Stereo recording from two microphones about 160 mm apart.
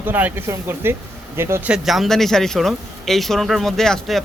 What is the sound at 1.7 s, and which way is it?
Speech, centre (ahead or behind).